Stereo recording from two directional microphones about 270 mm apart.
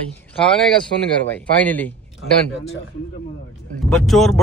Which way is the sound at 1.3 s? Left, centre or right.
Centre.